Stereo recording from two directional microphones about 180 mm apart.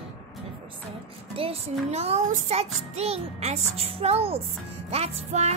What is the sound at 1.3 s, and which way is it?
Child singing, 30° right (ahead or behind).